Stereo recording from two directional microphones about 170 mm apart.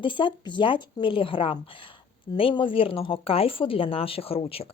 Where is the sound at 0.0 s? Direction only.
30° left (ahead or behind).